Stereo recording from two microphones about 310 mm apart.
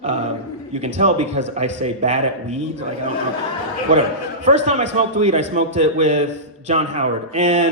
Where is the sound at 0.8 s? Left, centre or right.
Right.